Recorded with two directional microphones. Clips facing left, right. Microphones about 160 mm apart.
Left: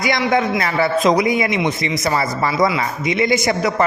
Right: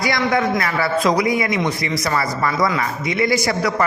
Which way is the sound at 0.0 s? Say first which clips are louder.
Left 1 dB; 20° left (ahead or behind).